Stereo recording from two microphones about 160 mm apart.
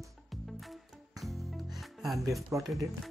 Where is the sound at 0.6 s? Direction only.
Centre (ahead or behind).